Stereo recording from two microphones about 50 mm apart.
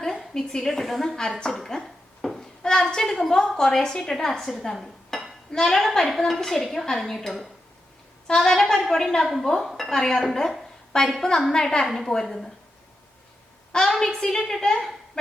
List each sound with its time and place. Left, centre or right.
0.0 s a woman's voice: centre
1.5 s a sound: centre
2.9 s a woman's voice: centre
9.2 s a woman's voice: centre
11.9 s a woman's voice: centre
14.0 s a woman's voice: centre